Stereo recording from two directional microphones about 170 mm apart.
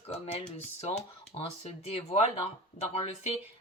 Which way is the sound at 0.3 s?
40° left (ahead or behind).